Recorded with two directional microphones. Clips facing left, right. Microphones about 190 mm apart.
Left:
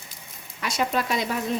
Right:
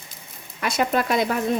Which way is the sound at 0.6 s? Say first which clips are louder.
Right 4 dB; 55° right (ahead or behind).